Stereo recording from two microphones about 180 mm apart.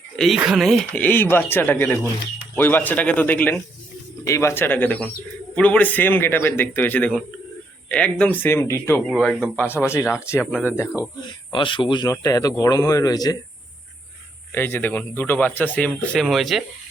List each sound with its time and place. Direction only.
0.2 s speech: centre (ahead or behind); by 9.0 s 15° left (ahead or behind)
9.0 s speech: centre (ahead or behind)
9.6 s speech: 15° left (ahead or behind)
11.5 s speech: 30° left (ahead or behind)
14.5 s speech: 10° left (ahead or behind)